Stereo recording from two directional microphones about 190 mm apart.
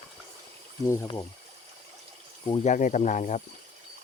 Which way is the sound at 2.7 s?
40° left (ahead or behind).